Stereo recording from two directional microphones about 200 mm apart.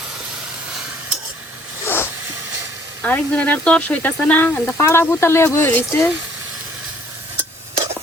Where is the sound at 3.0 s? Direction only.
5° left (ahead or behind).